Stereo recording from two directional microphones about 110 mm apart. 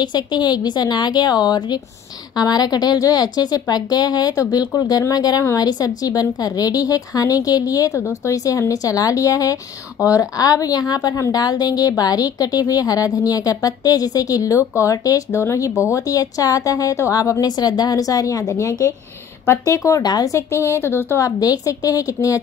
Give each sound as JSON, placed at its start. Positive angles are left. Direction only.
{"t": 0.0, "sound": "a woman's voice", "side_deg": 40}
{"t": 21.4, "sound": "a woman's voice", "side_deg": 35}